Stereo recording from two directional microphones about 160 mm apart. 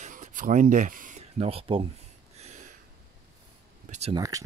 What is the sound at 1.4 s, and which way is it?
Speech, 35° right (ahead or behind).